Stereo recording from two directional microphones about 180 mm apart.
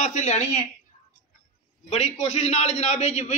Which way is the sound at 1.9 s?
35° left (ahead or behind).